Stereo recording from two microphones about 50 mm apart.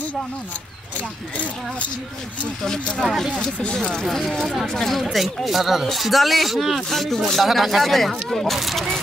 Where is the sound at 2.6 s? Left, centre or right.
Centre.